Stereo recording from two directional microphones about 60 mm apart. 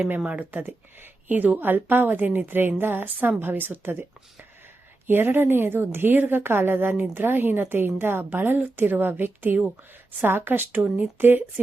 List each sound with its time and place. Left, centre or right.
0.3 s speech: right
5.0 s speech: right